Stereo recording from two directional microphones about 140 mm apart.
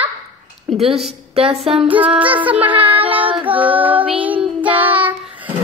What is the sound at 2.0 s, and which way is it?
Child singing, 10° right (ahead or behind).